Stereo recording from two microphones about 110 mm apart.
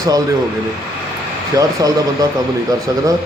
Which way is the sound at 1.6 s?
35° right (ahead or behind).